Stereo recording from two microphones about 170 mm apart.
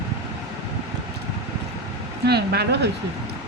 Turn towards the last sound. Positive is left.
turn(degrees=-70)  # may be behind; listen again after turning